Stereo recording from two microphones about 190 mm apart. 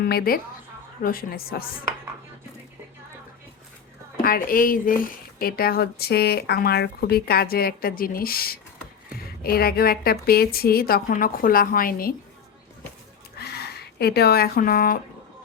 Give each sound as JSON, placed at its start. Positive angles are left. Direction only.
{"t": 0.0, "sound": "speech", "side_deg": 55}
{"t": 4.2, "sound": "speech", "side_deg": 50}
{"t": 13.4, "sound": "a sound", "side_deg": 55}